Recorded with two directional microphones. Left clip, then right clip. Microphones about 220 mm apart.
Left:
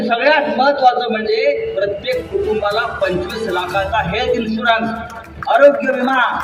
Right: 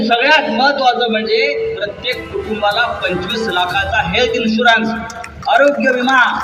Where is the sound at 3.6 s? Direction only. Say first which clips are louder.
Right 2 dB; 50° left (ahead or behind).